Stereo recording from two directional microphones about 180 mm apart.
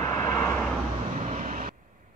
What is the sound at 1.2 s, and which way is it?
Vehicle, 45° right (ahead or behind).